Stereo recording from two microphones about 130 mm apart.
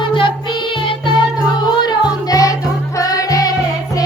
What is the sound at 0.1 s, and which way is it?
Music, 40° left (ahead or behind).